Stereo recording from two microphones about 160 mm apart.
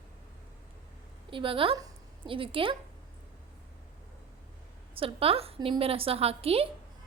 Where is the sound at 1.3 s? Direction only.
35° right (ahead or behind).